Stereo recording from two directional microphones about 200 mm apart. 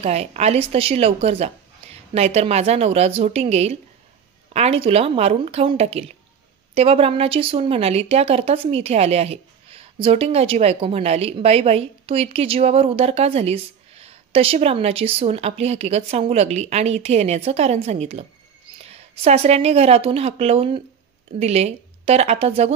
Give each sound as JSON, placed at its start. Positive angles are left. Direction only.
{"t": 0.0, "sound": "a woman's voice", "side_deg": -30}